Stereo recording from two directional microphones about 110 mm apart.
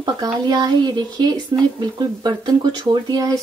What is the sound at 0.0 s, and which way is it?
Speech, 40° right (ahead or behind).